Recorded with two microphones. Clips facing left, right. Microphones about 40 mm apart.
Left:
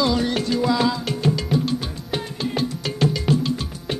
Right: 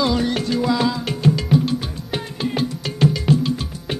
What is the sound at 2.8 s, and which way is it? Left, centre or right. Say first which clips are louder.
Music: right 3 dB; centre.